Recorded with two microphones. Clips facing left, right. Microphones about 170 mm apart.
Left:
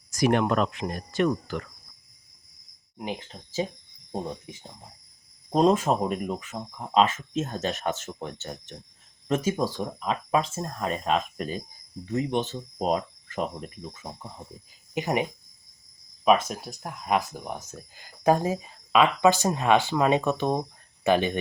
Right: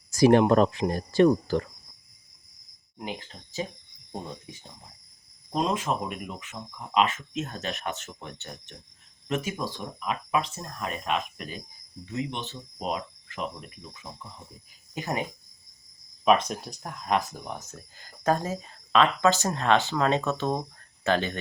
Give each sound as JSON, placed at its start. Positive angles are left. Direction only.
{"t": 0.1, "sound": "speech", "side_deg": -30}
{"t": 3.0, "sound": "speech", "side_deg": 20}
{"t": 5.5, "sound": "speech", "side_deg": 40}
{"t": 12.1, "sound": "speech", "side_deg": 45}
{"t": 14.9, "sound": "speech", "side_deg": 20}
{"t": 16.2, "sound": "speech", "side_deg": 5}